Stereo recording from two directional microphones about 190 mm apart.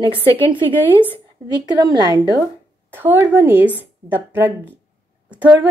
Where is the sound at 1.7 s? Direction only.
20° right (ahead or behind).